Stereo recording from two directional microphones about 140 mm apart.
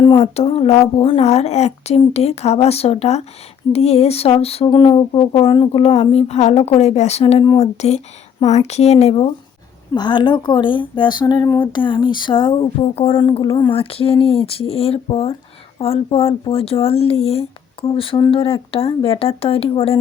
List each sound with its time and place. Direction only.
0.2 s music: 45° left (ahead or behind)
9.9 s speech: 30° left (ahead or behind)
13.7 s music: 45° left (ahead or behind)